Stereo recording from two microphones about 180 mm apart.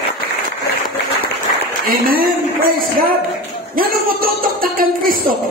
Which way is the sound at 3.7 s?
50° right (ahead or behind).